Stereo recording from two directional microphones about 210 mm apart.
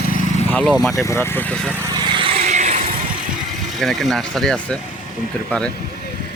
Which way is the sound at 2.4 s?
35° right (ahead or behind).